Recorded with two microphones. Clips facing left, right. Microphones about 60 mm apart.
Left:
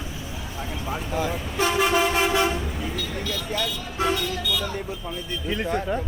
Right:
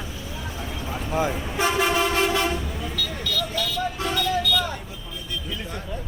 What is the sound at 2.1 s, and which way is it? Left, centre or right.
Toot, centre.